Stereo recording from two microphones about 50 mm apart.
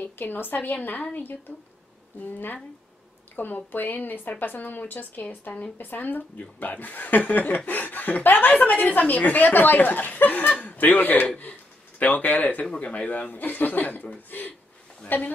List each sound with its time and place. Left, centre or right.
0.0 s a woman's voice: left
2.3 s speech: left